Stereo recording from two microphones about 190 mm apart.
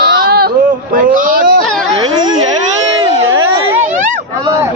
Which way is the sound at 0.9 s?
45° right (ahead or behind).